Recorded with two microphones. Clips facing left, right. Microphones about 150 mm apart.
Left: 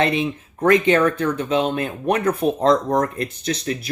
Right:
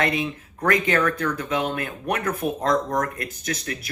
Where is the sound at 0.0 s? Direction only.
25° left (ahead or behind).